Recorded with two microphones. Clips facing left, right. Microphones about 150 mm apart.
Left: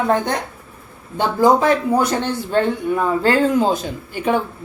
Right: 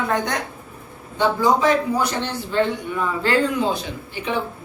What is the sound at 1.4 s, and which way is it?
A man's voice, 50° left (ahead or behind).